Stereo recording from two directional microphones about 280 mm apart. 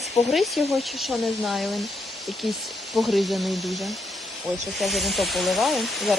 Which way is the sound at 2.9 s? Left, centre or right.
Centre.